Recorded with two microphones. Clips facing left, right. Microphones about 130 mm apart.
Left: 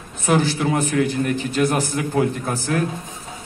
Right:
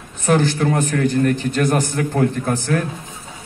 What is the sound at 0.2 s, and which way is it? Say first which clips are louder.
A man's voice: right 2 dB; 5° left (ahead or behind).